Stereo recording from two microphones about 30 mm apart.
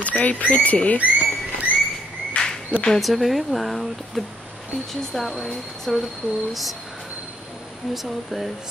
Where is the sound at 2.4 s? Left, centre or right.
Left.